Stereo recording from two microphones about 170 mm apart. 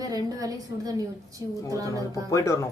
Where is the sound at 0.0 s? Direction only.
20° right (ahead or behind).